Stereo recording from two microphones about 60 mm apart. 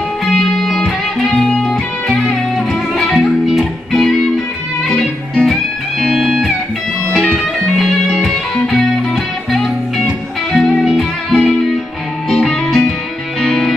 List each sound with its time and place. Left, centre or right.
0.2 s music: centre
7.1 s music: centre
7.7 s music: centre
11.0 s music: centre
12.3 s music: centre